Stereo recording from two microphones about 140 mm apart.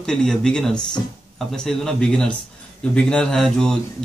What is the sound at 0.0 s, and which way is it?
Speech, 5° left (ahead or behind).